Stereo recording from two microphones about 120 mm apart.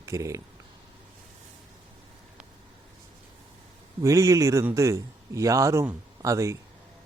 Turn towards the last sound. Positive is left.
turn(degrees=-25)  # may be behind; listen again after turning